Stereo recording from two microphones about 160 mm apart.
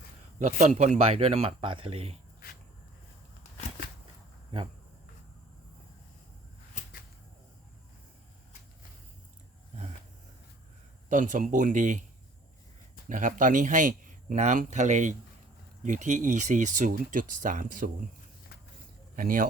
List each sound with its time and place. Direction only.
0.3 s speech: 50° right (ahead or behind)
6.8 s whip: 45° left (ahead or behind)
11.1 s speech: 55° right (ahead or behind)
13.1 s speech: 55° right (ahead or behind)
19.1 s speech: 60° right (ahead or behind)